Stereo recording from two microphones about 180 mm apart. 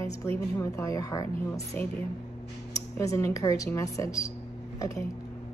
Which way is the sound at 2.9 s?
15° left (ahead or behind).